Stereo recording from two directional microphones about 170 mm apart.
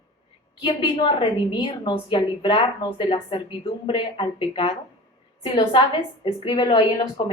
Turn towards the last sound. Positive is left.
turn(degrees=35)  # may be behind; listen again after turning